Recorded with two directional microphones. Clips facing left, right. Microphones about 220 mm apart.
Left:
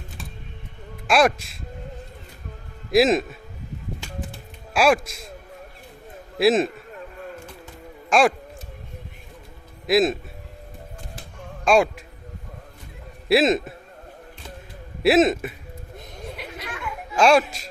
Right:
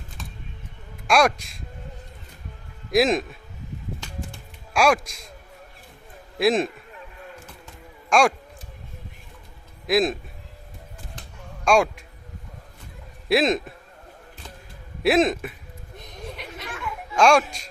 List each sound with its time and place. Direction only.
1.0 s a man's voice: centre (ahead or behind)
2.9 s a man's voice: centre (ahead or behind)
4.0 s music: 5° left (ahead or behind)
6.4 s a man's voice: 5° left (ahead or behind)
8.1 s a man's voice: centre (ahead or behind)
9.8 s a man's voice: centre (ahead or behind)
11.6 s speech: centre (ahead or behind)
13.2 s a man's voice: centre (ahead or behind)
15.0 s a man's voice: 5° left (ahead or behind)
16.4 s chatter: 5° left (ahead or behind)